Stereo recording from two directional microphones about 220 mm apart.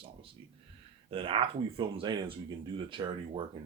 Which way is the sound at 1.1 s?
25° right (ahead or behind).